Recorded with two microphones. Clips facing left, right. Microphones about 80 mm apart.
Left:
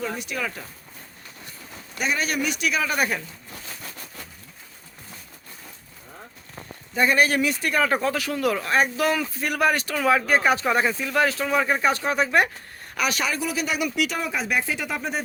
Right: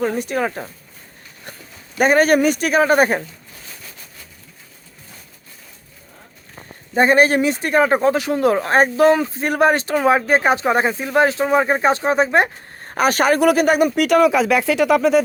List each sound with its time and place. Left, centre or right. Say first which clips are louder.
0.0 s speech: right 9 dB; right
2.0 s speech: right 12 dB; right
6.9 s speech: right 6 dB; right
12.9 s speech: right 10 dB; right
14.2 s speech: right 12 dB; right